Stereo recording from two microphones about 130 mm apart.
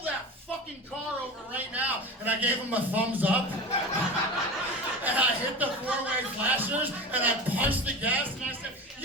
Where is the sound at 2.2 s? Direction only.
10° right (ahead or behind).